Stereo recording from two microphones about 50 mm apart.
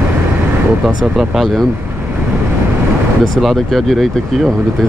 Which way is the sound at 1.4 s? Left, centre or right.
Centre.